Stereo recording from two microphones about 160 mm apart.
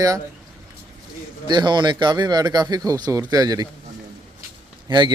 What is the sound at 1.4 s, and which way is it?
Speech, 25° right (ahead or behind).